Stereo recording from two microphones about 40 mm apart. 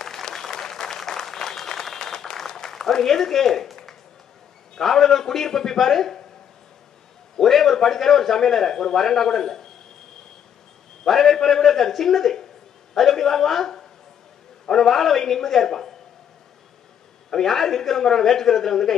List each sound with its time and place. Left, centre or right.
0.0 s applause: centre
4.7 s a man's voice: centre
7.3 s a man's voice: centre
11.1 s a man's voice: centre
17.3 s a man's voice: centre